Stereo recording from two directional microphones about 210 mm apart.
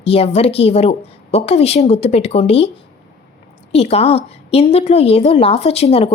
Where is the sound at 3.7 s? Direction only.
30° left (ahead or behind).